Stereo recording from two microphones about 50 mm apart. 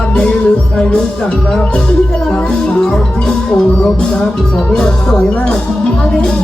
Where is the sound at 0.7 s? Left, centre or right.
Centre.